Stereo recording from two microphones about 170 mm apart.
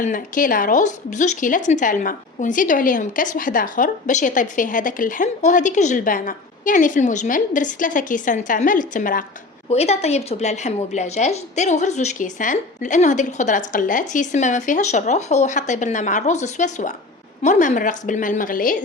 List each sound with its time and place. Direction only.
0.0 s speech: 50° left (ahead or behind)
9.6 s speech: 40° left (ahead or behind)